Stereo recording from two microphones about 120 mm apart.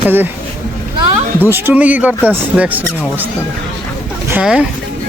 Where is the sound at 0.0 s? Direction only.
15° right (ahead or behind).